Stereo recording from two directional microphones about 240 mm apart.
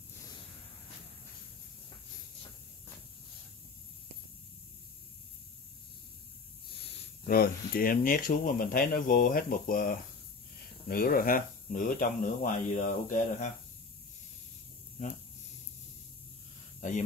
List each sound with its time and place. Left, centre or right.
7.2 s speech: left